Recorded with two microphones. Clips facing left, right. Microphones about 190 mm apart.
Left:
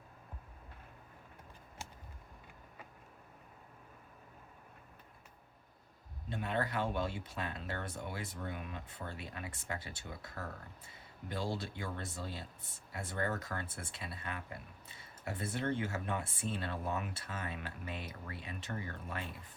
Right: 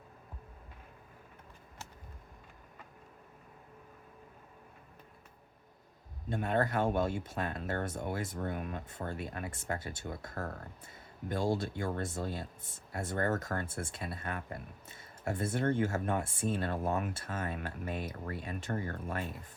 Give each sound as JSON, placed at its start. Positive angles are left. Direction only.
{"t": 6.2, "sound": "speech", "side_deg": -45}